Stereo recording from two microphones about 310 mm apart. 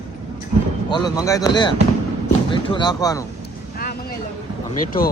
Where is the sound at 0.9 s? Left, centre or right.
Centre.